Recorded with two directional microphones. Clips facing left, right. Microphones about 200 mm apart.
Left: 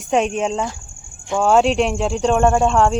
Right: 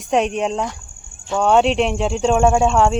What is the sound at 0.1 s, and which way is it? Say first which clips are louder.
Speech: even; centre (ahead or behind).